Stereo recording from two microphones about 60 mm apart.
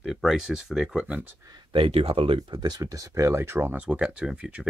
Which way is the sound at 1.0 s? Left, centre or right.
Right.